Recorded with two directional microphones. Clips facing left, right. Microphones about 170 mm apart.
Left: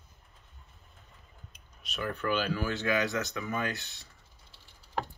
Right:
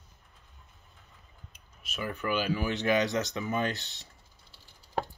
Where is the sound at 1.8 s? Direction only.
5° right (ahead or behind); by 4.1 s 20° right (ahead or behind).